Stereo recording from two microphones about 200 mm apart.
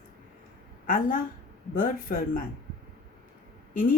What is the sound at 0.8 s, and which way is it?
A woman's voice, 40° left (ahead or behind).